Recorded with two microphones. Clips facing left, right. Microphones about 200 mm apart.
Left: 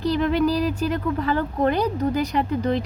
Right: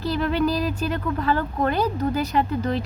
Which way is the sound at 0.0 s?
15° left (ahead or behind).